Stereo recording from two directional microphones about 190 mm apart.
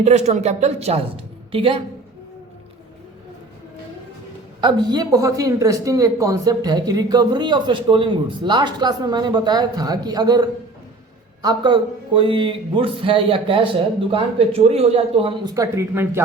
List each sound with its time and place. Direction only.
0.0 s speech: 35° right (ahead or behind)
4.6 s speech: 20° right (ahead or behind)